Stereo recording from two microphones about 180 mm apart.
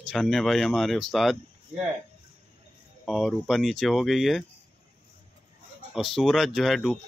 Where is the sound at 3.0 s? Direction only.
Centre (ahead or behind).